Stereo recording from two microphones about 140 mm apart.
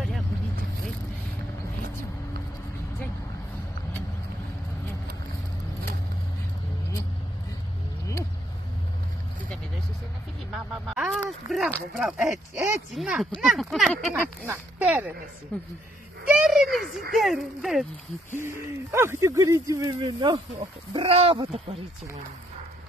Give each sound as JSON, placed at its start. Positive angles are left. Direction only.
{"t": 10.5, "sound": "a sound", "side_deg": 0}
{"t": 12.0, "sound": "a woman's voice", "side_deg": -5}
{"t": 15.5, "sound": "speech", "side_deg": 10}
{"t": 16.3, "sound": "a sound", "side_deg": 0}
{"t": 17.1, "sound": "speech", "side_deg": 0}
{"t": 18.3, "sound": "speech", "side_deg": -20}